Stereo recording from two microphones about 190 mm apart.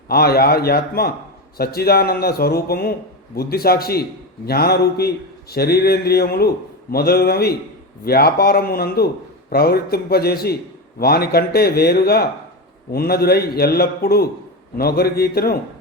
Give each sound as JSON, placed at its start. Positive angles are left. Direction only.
{"t": 0.1, "sound": "speech", "side_deg": 55}